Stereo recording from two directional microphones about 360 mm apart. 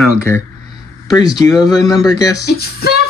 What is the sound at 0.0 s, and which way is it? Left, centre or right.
Speech, centre.